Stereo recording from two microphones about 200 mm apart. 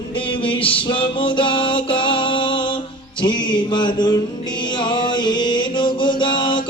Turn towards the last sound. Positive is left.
turn(degrees=25)  # may be behind; listen again after turning